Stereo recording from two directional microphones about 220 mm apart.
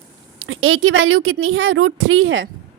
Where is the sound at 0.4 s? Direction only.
70° right (ahead or behind).